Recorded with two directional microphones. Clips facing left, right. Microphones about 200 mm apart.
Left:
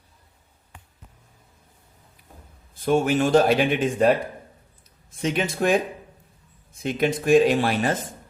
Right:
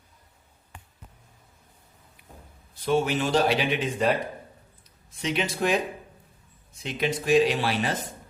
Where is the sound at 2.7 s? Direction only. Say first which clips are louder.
Left 4 dB; 50° left (ahead or behind).